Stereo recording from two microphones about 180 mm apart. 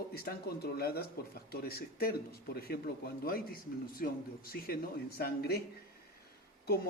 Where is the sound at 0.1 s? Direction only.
60° left (ahead or behind).